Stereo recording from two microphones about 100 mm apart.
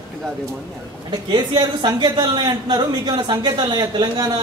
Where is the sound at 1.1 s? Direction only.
45° right (ahead or behind).